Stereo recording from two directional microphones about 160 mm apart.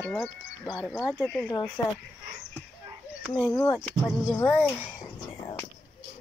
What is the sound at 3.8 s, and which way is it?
Speech, 5° left (ahead or behind).